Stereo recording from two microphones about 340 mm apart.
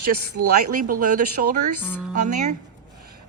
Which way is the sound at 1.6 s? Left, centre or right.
Right.